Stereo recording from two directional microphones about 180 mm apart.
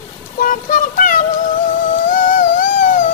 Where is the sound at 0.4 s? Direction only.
50° left (ahead or behind).